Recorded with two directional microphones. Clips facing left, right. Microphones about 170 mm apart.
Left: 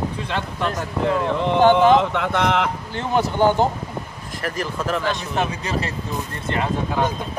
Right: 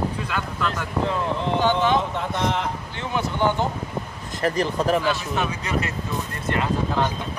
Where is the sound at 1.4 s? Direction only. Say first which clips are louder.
Left 7 dB; 55° left (ahead or behind).